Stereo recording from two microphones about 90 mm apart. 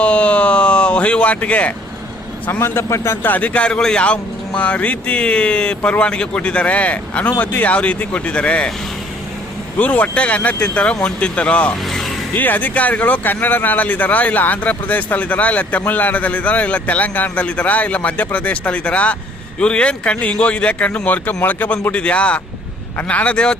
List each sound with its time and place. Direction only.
0.0 s a sound: 15° left (ahead or behind)
2.5 s a man's voice: 25° left (ahead or behind)
3.2 s speech: 15° left (ahead or behind)
9.7 s speech: 15° left (ahead or behind)
11.9 s music: centre (ahead or behind)
12.3 s speech: 20° left (ahead or behind)